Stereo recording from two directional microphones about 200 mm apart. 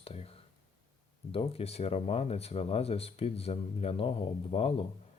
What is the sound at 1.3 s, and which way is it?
Speech, 30° left (ahead or behind).